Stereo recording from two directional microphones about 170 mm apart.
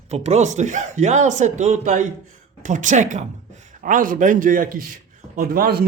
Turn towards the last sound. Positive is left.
turn(degrees=-60)  # may be behind; listen again after turning